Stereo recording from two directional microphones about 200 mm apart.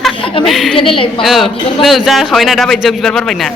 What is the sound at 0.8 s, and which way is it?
Speech, 25° left (ahead or behind).